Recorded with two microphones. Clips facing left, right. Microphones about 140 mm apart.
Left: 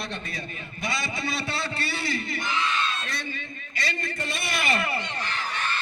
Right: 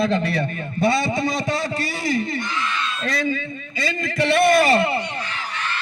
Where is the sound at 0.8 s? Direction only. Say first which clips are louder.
Right 12 dB; 25° right (ahead or behind).